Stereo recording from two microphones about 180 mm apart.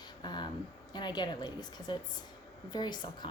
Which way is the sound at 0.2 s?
25° left (ahead or behind).